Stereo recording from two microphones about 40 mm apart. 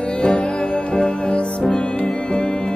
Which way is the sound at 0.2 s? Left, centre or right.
Left.